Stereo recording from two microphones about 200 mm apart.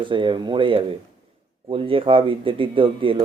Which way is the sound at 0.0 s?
25° right (ahead or behind).